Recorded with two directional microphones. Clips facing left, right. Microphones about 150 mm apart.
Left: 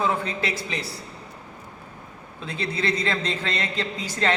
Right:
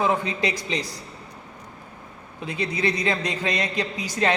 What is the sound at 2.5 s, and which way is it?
A man's voice, 15° right (ahead or behind).